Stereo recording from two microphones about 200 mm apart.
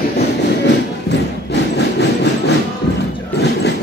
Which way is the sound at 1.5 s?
60° left (ahead or behind).